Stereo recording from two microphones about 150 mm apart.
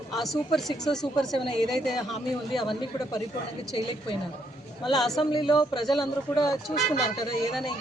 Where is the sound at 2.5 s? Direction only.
30° left (ahead or behind).